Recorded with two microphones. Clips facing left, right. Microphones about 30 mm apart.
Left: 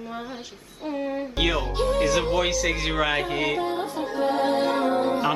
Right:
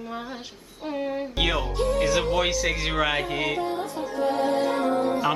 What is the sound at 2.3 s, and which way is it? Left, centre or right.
Speech, centre.